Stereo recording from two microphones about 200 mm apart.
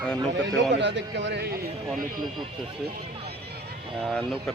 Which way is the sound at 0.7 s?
60° right (ahead or behind).